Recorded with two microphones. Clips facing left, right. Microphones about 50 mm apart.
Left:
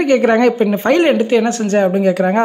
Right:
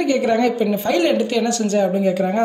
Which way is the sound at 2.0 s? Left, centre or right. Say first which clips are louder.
Left 5 dB; left.